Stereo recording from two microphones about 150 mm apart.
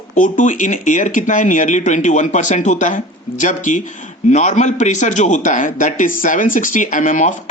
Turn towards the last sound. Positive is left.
turn(degrees=55)  # may be behind; listen again after turning